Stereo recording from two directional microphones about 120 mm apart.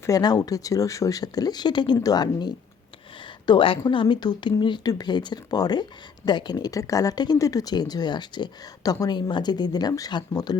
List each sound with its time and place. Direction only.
0.0 s speech: 30° left (ahead or behind)